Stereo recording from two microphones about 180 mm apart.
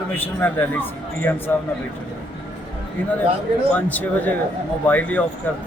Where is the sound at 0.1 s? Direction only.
10° left (ahead or behind).